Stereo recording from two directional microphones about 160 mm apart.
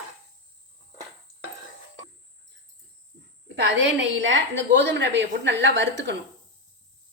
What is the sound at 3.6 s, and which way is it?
A woman's voice, 90° right.